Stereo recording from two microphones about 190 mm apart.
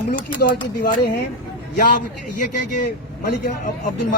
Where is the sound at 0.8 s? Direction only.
60° left (ahead or behind).